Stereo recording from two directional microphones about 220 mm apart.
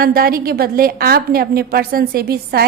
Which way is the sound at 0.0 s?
40° right (ahead or behind).